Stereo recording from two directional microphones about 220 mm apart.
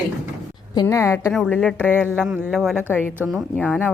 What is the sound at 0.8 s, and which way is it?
A woman's voice, 15° left (ahead or behind).